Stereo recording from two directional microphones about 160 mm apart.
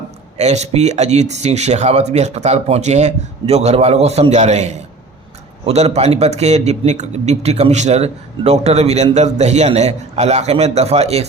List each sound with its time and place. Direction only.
0.3 s speech: 45° right (ahead or behind)